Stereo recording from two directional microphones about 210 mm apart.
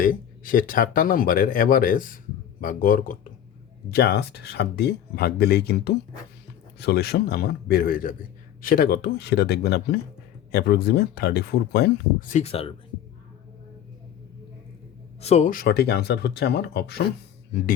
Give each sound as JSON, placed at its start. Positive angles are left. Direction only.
{"t": 0.0, "sound": "a man's voice", "side_deg": 40}
{"t": 3.9, "sound": "speech", "side_deg": 50}
{"t": 12.3, "sound": "speech", "side_deg": 30}
{"t": 15.2, "sound": "speech", "side_deg": 30}